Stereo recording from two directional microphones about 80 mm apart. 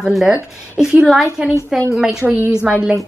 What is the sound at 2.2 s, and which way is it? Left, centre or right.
Speech, right.